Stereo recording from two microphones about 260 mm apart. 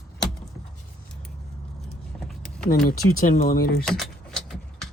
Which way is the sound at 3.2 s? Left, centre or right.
Left.